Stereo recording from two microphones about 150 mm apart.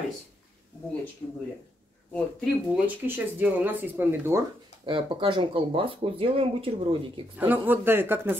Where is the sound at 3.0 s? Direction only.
15° right (ahead or behind).